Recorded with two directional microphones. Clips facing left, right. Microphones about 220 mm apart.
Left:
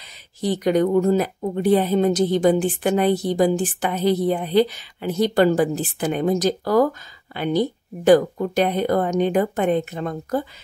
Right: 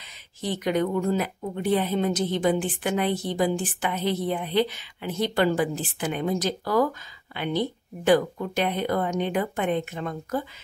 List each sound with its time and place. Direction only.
0.0 s speech: 40° left (ahead or behind)